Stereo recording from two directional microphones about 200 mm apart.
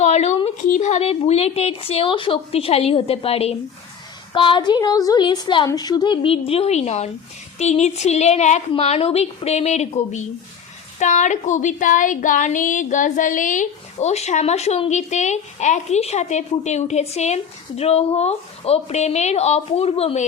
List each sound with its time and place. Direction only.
0.0 s a woman's voice: 35° left (ahead or behind)